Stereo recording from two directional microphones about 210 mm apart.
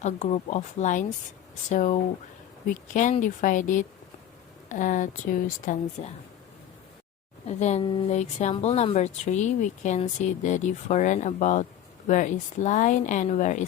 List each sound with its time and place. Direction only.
0.0 s speech: 35° left (ahead or behind)
7.4 s speech: 30° left (ahead or behind)